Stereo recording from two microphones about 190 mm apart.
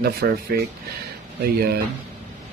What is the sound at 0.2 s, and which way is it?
Speech, 60° right (ahead or behind).